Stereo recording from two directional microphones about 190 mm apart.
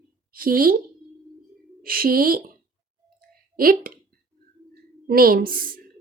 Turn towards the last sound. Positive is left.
turn(degrees=-50)  # may be behind; listen again after turning